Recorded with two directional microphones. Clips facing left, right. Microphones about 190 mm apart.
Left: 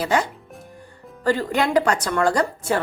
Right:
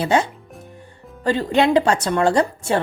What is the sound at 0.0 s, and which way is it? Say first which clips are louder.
A woman's voice: right 3 dB; 25° right (ahead or behind).